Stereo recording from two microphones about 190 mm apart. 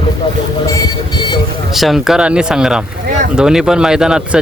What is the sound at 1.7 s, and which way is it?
Speech, centre (ahead or behind).